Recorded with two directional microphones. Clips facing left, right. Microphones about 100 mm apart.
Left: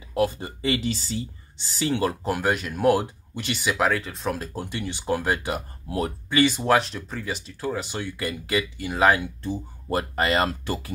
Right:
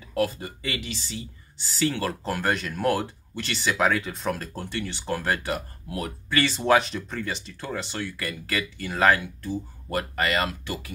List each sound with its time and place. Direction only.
0.1 s speech: 25° left (ahead or behind)
1.8 s speech: 20° left (ahead or behind)
5.9 s speech: 30° left (ahead or behind)
6.3 s speech: 15° left (ahead or behind)
6.6 s speech: centre (ahead or behind)
9.2 s speech: 25° left (ahead or behind)